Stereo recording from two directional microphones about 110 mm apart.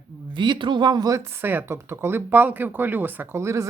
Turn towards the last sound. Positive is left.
turn(degrees=-25)  # may be behind; listen again after turning